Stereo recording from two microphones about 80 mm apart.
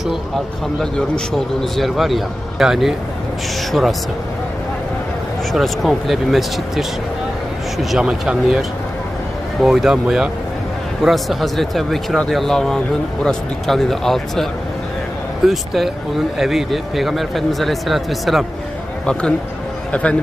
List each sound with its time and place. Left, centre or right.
0.8 s speech: centre
5.5 s speech: centre
15.4 s speech: centre
19.9 s speech: centre